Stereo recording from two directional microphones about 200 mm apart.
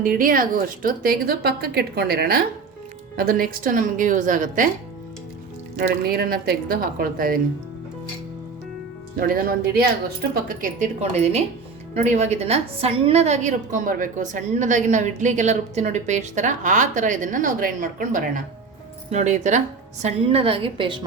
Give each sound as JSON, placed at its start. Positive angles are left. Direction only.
{"t": 0.0, "sound": "a woman's voice", "side_deg": -45}
{"t": 5.9, "sound": "a woman's voice", "side_deg": -50}
{"t": 9.1, "sound": "a woman's voice", "side_deg": -45}